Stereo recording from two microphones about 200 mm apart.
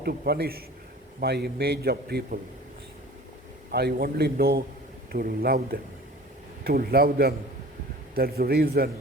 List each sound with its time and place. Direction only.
0.0 s a man's voice: 50° right (ahead or behind)
3.7 s a man's voice: 50° right (ahead or behind)